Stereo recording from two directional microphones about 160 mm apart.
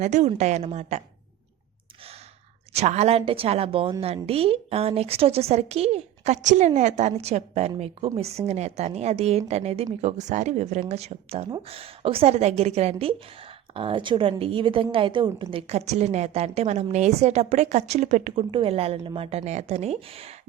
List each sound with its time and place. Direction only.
0.0 s a woman's voice: 45° right (ahead or behind)
2.7 s a woman's voice: 45° right (ahead or behind)